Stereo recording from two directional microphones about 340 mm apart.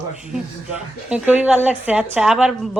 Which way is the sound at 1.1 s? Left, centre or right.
Centre.